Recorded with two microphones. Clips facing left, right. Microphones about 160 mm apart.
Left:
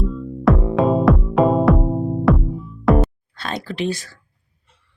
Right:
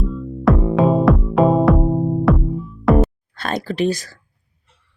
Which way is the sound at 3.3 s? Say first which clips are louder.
Right 5 dB; 50° right (ahead or behind).